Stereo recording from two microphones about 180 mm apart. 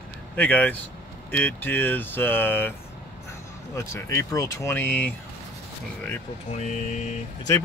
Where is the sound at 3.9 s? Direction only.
15° left (ahead or behind).